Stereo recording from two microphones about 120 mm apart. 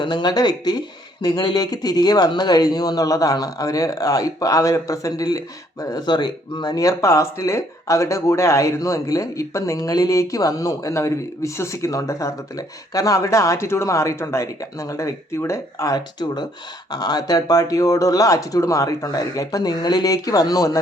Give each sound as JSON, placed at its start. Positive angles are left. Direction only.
{"t": 0.0, "sound": "speech", "side_deg": 40}